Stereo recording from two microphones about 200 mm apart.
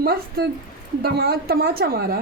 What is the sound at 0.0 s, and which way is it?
A woman's voice, 50° right (ahead or behind).